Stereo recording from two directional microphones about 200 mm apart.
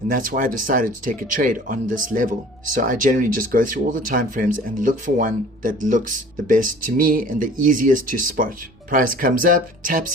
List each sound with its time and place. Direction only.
0.1 s speech: 45° right (ahead or behind)